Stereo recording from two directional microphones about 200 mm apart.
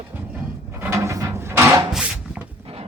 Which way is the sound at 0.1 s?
10° right (ahead or behind).